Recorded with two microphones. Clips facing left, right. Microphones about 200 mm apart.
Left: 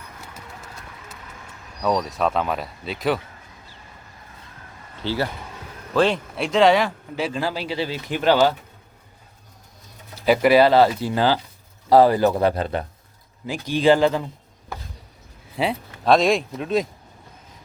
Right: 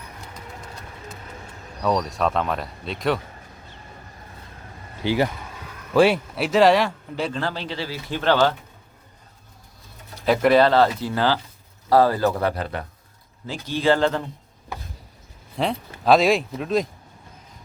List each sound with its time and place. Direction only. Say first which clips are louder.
1.8 s speech: even; centre (ahead or behind)
5.0 s speech: right 3 dB; 15° right (ahead or behind); by 8.5 s 10° left (ahead or behind)
10.2 s speech: left 1 dB; 5° left (ahead or behind)
15.5 s speech: left 1 dB; centre (ahead or behind)